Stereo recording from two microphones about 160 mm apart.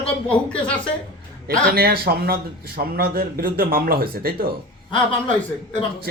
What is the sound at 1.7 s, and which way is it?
A man's voice, 70° right (ahead or behind).